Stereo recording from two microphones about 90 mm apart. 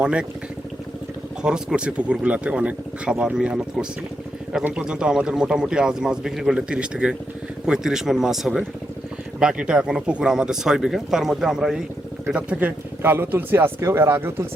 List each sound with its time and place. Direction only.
0.0 s speech: 10° right (ahead or behind)
1.4 s speech: 10° right (ahead or behind); by 14.4 s 25° right (ahead or behind)